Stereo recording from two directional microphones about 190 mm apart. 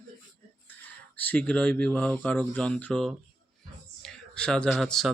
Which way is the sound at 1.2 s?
10° left (ahead or behind).